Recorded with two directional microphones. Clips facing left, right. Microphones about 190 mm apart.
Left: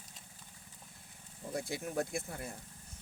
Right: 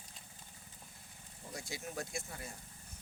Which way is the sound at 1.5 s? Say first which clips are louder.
Left 7 dB; 55° left (ahead or behind).